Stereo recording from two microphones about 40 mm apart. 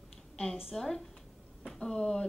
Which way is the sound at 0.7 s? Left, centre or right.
Centre.